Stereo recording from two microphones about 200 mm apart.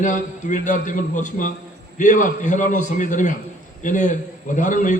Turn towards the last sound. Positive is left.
turn(degrees=40)  # may be behind; listen again after turning